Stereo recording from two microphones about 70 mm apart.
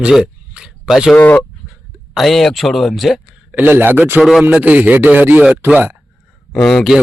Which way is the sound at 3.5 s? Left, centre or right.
Right.